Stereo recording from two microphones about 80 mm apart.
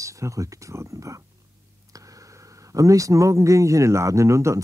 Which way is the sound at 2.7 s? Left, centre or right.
Right.